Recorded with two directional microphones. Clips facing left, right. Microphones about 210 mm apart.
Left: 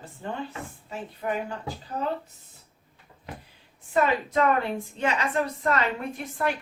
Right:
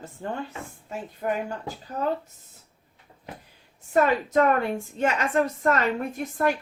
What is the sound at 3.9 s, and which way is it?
A woman's voice, 45° right (ahead or behind).